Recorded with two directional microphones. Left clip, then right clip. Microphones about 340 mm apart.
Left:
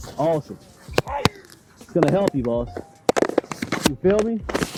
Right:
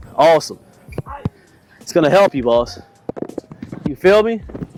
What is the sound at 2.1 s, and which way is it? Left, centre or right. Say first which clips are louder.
Speech: right 9 dB; centre.